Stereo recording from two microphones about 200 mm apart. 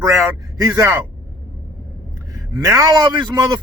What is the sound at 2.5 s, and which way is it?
Speech, 15° right (ahead or behind).